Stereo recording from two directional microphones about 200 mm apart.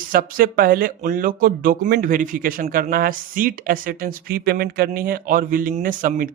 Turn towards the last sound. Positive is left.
turn(degrees=-45)  # may be behind; listen again after turning